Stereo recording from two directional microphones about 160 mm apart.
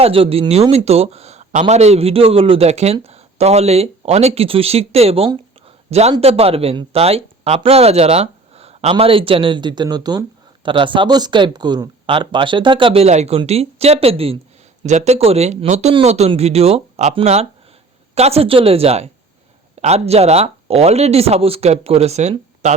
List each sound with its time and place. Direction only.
0.0 s speech: 35° right (ahead or behind)